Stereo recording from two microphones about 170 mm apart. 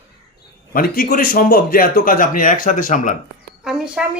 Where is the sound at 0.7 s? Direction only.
55° left (ahead or behind).